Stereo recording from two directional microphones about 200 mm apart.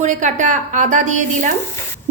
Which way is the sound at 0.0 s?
35° right (ahead or behind).